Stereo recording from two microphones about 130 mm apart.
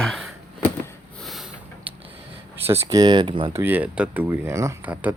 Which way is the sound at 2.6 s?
25° right (ahead or behind).